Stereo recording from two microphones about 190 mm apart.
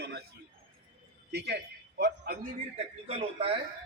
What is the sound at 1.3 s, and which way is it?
Speech, 60° right (ahead or behind).